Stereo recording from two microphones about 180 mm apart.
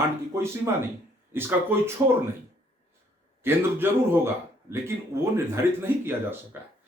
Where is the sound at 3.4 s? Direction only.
15° right (ahead or behind).